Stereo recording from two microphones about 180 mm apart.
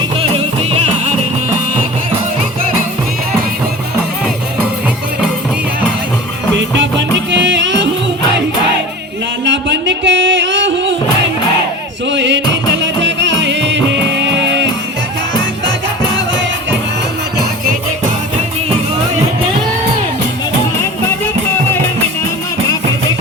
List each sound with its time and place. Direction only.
0.2 s music: 30° right (ahead or behind)
6.5 s music: 80° right
9.4 s music: 85° right
12.0 s music: 85° right